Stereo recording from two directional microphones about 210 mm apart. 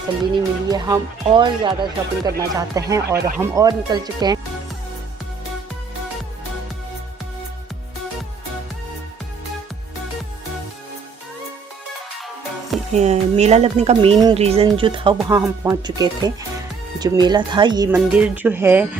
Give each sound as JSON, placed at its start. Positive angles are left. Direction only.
{"t": 0.7, "sound": "speech", "side_deg": -15}
{"t": 12.9, "sound": "speech", "side_deg": -30}
{"t": 18.1, "sound": "speech", "side_deg": -5}